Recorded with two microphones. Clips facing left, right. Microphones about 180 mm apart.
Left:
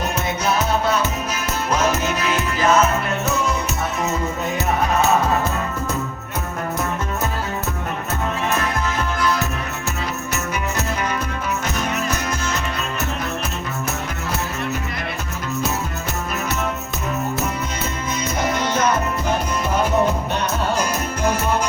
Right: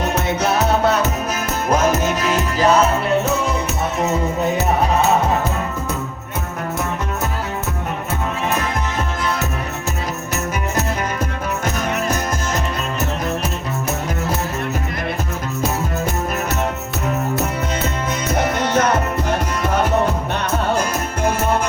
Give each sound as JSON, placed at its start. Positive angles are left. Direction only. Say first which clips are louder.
{"t": 1.7, "sound": "music", "louder": "right 3 dB", "side_deg": -45}
{"t": 18.3, "sound": "music", "louder": "right 3 dB", "side_deg": -65}